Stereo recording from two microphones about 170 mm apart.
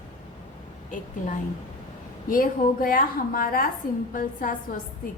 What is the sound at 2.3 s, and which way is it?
A woman's voice, 55° left (ahead or behind).